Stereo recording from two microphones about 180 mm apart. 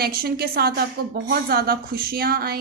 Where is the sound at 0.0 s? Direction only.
60° right (ahead or behind).